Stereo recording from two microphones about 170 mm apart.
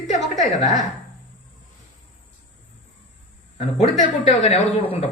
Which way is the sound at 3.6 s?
40° left (ahead or behind).